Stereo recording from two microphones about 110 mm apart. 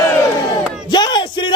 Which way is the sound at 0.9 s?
40° left (ahead or behind).